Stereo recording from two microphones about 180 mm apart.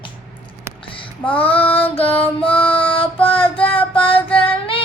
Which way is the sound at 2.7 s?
30° left (ahead or behind).